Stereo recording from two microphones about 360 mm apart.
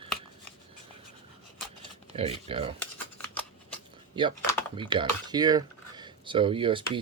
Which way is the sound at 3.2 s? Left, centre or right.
Centre.